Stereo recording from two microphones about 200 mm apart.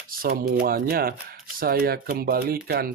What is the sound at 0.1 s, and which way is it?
Speech, 50° right (ahead or behind).